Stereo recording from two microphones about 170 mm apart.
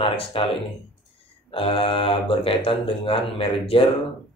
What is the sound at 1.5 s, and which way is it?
Speech, 30° left (ahead or behind).